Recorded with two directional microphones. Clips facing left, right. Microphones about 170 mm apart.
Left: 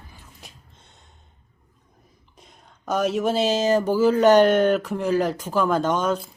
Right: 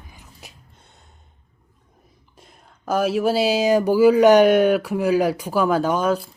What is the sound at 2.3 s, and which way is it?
Speech, 5° right (ahead or behind).